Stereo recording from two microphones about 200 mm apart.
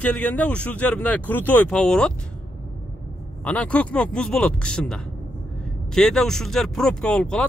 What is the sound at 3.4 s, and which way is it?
Speech, 5° left (ahead or behind).